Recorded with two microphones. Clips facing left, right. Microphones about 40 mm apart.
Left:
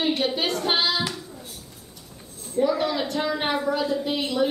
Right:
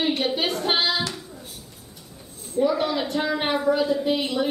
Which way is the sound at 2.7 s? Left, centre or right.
Centre.